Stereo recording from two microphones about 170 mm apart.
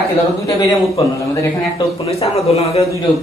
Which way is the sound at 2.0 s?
35° left (ahead or behind).